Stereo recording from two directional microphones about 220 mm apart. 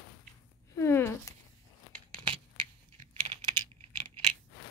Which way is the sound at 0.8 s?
10° left (ahead or behind).